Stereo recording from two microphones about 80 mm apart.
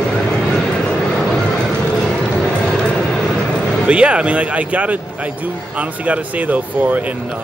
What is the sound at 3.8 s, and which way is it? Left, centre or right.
Speech, centre.